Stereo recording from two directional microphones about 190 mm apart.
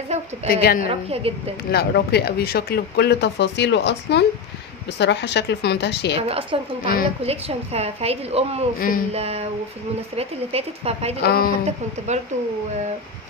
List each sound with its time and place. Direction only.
0.1 s a woman's voice: 35° right (ahead or behind)
0.5 s a woman's voice: 50° left (ahead or behind)
0.8 s a woman's voice: 30° right (ahead or behind)
1.7 s speech: 55° left (ahead or behind)
6.1 s a woman's voice: 30° right (ahead or behind)
8.7 s a woman's voice: 45° left (ahead or behind)
9.1 s a woman's voice: 35° right (ahead or behind)
11.2 s a woman's voice: 50° left (ahead or behind)